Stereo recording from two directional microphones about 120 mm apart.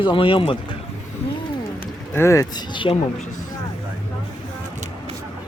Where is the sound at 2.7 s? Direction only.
45° left (ahead or behind).